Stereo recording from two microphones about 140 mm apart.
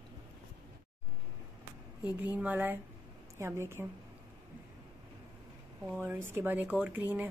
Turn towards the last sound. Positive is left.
turn(degrees=-10)  # may be behind; listen again after turning